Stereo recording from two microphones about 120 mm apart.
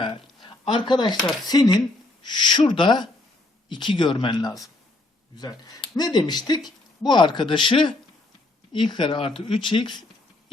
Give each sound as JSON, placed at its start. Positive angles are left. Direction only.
{"t": 0.4, "sound": "speech", "side_deg": 40}